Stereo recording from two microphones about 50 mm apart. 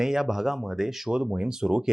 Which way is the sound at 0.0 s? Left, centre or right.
Centre.